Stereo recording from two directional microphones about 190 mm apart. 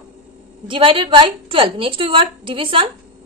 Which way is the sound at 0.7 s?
25° right (ahead or behind).